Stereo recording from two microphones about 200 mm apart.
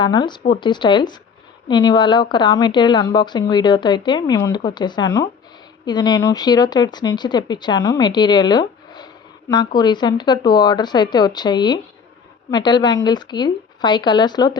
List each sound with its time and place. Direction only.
0.0 s speech: 20° left (ahead or behind)